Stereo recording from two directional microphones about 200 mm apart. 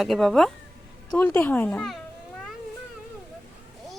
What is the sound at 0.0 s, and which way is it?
Speech, centre (ahead or behind).